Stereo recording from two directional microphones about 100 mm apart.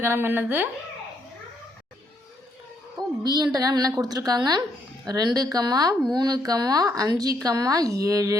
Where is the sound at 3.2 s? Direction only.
45° right (ahead or behind).